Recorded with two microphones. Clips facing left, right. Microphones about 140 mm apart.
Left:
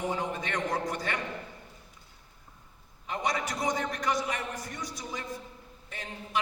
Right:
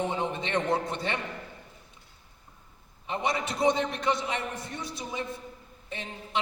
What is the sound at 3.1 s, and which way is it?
A man's voice, 25° right (ahead or behind).